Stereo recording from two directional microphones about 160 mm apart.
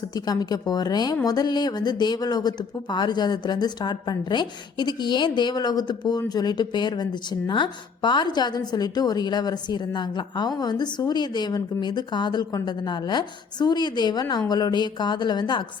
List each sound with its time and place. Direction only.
0.1 s speech: 25° left (ahead or behind)